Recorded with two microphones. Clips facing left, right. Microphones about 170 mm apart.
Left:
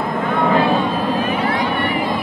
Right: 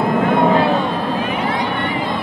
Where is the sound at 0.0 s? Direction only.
15° right (ahead or behind).